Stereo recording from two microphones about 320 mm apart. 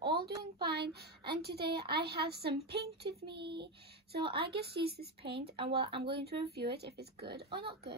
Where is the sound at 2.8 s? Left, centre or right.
Centre.